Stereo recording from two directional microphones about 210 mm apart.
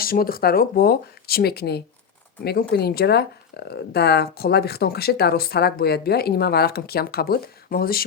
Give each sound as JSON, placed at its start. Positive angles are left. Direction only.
{"t": 0.0, "sound": "speech", "side_deg": 45}